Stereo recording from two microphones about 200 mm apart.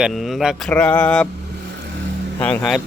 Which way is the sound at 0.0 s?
Centre (ahead or behind).